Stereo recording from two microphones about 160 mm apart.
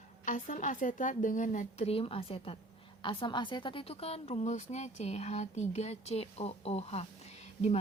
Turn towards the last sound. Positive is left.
turn(degrees=45)  # may be behind; listen again after turning